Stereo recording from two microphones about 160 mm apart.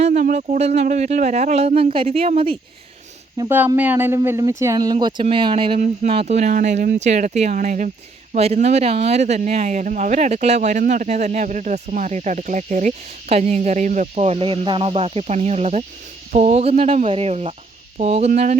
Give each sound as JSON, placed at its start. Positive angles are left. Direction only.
{"t": 0.0, "sound": "speech", "side_deg": -50}
{"t": 3.4, "sound": "speech", "side_deg": -25}
{"t": 3.8, "sound": "speech", "side_deg": -10}
{"t": 17.9, "sound": "a sound", "side_deg": -40}